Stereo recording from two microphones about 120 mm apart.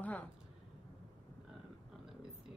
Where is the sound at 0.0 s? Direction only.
15° left (ahead or behind).